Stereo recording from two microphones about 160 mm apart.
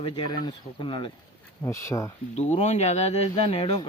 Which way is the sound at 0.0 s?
25° left (ahead or behind).